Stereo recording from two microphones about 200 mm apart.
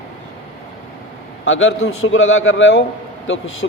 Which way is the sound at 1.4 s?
80° left.